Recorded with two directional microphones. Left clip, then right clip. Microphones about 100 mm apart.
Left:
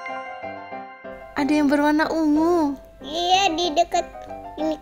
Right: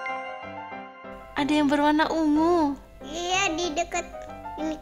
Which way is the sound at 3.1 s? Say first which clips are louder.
Left 6 dB; 35° left (ahead or behind).